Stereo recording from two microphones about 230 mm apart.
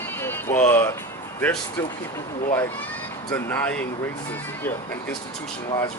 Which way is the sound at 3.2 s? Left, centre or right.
Centre.